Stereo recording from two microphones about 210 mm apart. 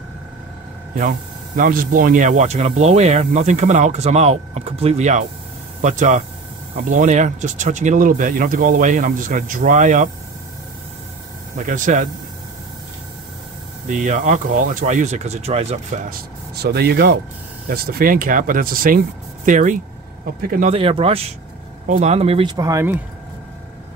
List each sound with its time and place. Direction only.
1.6 s speech: 40° right (ahead or behind)
11.5 s speech: 40° right (ahead or behind)
13.8 s speech: 35° right (ahead or behind)
16.1 s speech: 50° right (ahead or behind)
20.7 s speech: 25° right (ahead or behind)
22.6 s speech: 15° right (ahead or behind)